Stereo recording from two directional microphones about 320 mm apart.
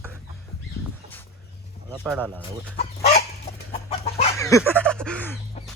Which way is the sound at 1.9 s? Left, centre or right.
Centre.